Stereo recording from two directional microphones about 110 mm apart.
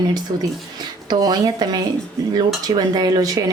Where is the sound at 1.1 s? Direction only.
35° right (ahead or behind).